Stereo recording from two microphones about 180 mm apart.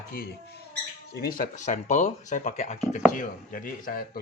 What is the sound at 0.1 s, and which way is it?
Speech, 55° left (ahead or behind).